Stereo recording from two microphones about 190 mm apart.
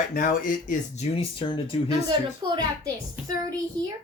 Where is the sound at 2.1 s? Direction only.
25° right (ahead or behind).